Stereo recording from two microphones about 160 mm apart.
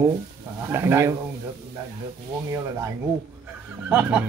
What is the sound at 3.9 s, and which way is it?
Speech, 10° right (ahead or behind).